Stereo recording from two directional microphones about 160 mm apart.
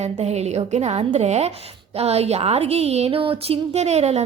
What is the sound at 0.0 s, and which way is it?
A woman's voice, 45° right (ahead or behind).